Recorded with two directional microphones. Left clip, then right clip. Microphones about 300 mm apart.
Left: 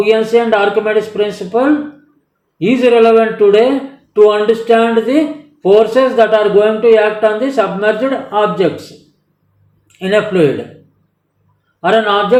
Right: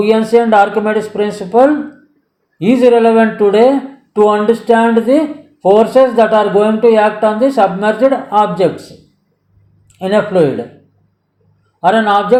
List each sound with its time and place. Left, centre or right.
0.3 s speech: centre
10.0 s speech: centre
11.8 s speech: centre